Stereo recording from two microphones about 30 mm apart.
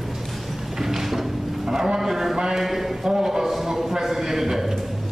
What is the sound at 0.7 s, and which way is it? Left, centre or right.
Clip-clop, centre.